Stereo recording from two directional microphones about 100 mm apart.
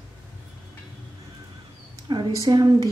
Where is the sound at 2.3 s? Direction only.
35° right (ahead or behind).